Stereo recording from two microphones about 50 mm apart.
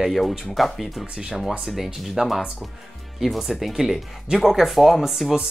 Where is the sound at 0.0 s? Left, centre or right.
Centre.